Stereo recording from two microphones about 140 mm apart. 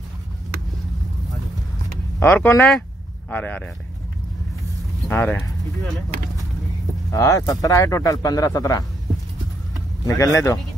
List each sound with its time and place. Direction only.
2.1 s speech: 15° left (ahead or behind)
5.0 s speech: 10° left (ahead or behind)
7.1 s speech: 25° left (ahead or behind)
10.0 s speech: 25° left (ahead or behind)